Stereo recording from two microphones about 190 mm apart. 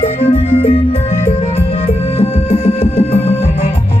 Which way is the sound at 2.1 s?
30° left (ahead or behind).